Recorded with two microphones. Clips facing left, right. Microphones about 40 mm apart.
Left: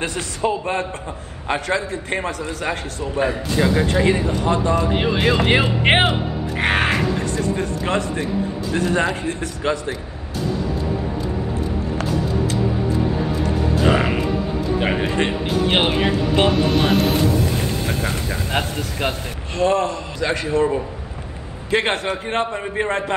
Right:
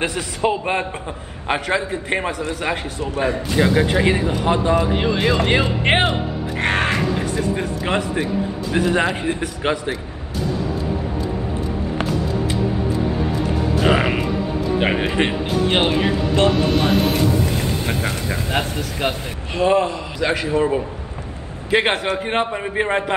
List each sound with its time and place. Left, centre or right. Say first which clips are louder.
0.4 s speech: right 1 dB; right
1.5 s a man's voice: right 1 dB; centre
4.9 s speech: even; centre
6.6 s crow: left 1 dB; centre
7.3 s a man's voice: even; centre
9.6 s a man's voice: left 1 dB; right
13.8 s music: right 1 dB; centre
14.8 s speech: right 2 dB; centre
15.7 s speech: even; centre
17.8 s a man's voice: right 1 dB; centre
19.5 s a man's voice: right 1 dB; centre
21.6 s a man's voice: right 2 dB; centre